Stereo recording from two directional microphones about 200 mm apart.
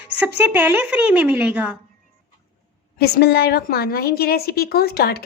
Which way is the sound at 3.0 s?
55° left (ahead or behind).